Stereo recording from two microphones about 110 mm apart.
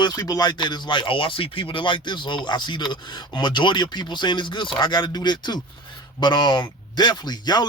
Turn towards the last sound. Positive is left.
turn(degrees=40)  # may be behind; listen again after turning